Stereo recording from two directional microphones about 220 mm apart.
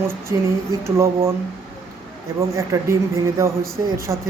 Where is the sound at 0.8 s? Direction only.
10° right (ahead or behind).